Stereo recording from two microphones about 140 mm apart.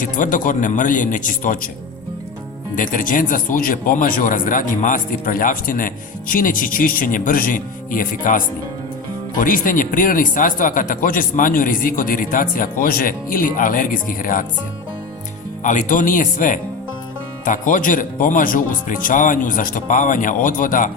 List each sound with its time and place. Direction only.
0.0 s speech: 70° left (ahead or behind)
2.7 s speech: 70° left (ahead or behind)
9.4 s speech: 80° left
15.6 s speech: 65° left (ahead or behind)